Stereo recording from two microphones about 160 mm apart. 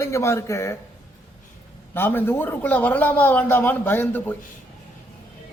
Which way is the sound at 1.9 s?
15° left (ahead or behind).